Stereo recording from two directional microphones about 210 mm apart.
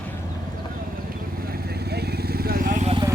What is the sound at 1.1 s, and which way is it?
Vehicle, 45° right (ahead or behind).